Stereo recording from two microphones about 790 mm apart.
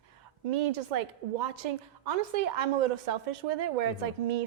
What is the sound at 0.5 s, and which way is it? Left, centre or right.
A woman's voice, right.